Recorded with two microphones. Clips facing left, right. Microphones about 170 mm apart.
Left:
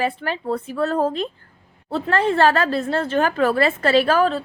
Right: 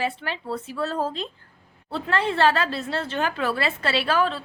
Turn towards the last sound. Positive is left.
turn(degrees=45)  # may be behind; listen again after turning